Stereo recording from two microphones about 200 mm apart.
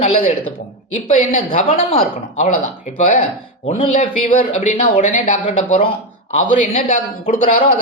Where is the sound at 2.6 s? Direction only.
40° left (ahead or behind).